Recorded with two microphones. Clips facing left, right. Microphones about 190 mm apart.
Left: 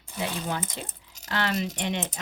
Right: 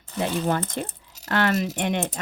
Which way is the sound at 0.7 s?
55° right (ahead or behind).